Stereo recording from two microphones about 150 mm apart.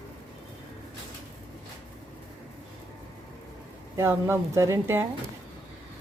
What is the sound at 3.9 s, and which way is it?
A woman's voice, 15° right (ahead or behind).